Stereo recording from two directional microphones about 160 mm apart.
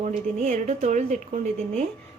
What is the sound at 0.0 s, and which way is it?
A woman's voice, 55° right (ahead or behind).